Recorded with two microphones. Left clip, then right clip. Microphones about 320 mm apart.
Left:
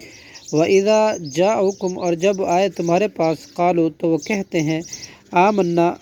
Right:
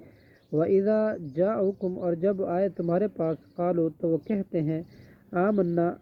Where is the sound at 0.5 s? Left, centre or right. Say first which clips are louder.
Left 9 dB; left.